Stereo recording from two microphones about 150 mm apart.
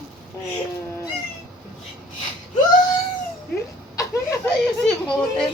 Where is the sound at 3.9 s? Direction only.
20° left (ahead or behind).